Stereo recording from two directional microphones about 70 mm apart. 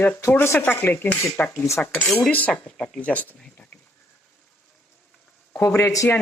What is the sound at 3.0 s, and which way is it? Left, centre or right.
Speech, left.